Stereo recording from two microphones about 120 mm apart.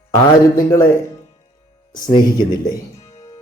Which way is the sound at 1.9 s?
35° left (ahead or behind).